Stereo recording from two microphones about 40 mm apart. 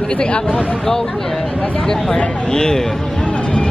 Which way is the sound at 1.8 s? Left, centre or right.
Centre.